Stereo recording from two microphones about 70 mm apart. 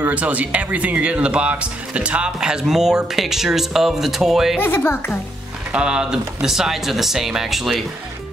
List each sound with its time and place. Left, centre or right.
0.0 s speech: right; by 4.6 s centre
4.6 s speech: left
5.7 s speech: centre